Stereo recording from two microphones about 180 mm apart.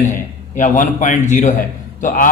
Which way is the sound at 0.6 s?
45° left (ahead or behind).